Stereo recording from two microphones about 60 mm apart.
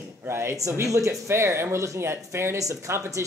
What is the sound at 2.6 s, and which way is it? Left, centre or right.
Speech, right.